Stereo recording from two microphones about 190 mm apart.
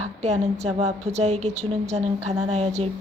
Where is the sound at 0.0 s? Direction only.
35° right (ahead or behind).